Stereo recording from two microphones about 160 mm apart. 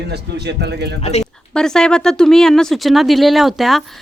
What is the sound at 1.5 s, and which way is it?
Speech, 5° left (ahead or behind).